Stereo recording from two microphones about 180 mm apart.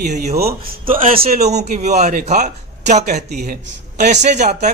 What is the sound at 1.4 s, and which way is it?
A man's voice, 40° right (ahead or behind).